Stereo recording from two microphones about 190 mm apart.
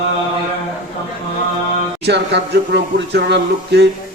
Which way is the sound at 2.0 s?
65° right (ahead or behind).